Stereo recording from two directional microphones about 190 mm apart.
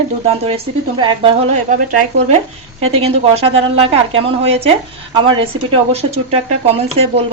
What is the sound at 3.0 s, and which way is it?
Speech, 30° right (ahead or behind).